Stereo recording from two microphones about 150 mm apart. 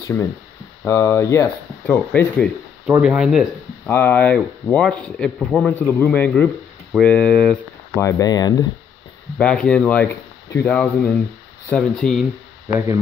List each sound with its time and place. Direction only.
0.0 s speech: 20° left (ahead or behind)
3.0 s speech: 5° right (ahead or behind)
3.9 s speech: 15° left (ahead or behind)
8.0 s speech: 25° left (ahead or behind)
9.4 s speech: 5° left (ahead or behind)
12.6 s speech: 20° right (ahead or behind)